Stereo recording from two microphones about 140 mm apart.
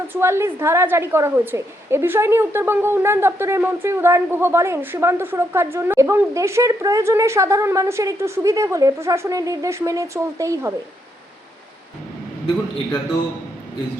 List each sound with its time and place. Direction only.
0.1 s a woman's voice: 20° right (ahead or behind)